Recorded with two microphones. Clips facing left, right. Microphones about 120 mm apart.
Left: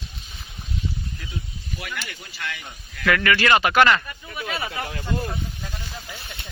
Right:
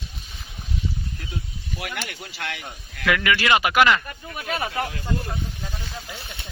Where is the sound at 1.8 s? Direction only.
60° right (ahead or behind).